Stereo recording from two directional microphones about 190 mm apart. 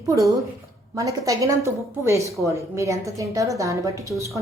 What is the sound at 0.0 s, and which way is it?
A woman's voice, 20° right (ahead or behind).